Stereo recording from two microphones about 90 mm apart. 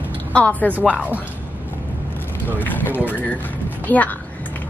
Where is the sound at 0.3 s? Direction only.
15° left (ahead or behind).